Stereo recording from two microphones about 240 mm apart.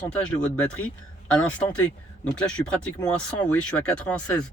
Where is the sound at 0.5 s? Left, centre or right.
Centre.